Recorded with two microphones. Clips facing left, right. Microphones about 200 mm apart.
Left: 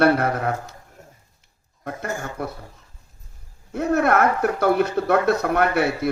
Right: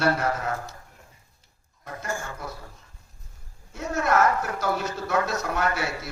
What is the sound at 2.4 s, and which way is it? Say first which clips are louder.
Speech: left 8 dB; 60° left (ahead or behind).